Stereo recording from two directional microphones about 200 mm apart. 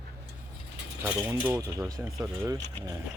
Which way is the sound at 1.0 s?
10° right (ahead or behind).